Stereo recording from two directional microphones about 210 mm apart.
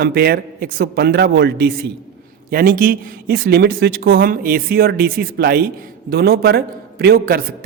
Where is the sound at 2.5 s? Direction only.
45° right (ahead or behind).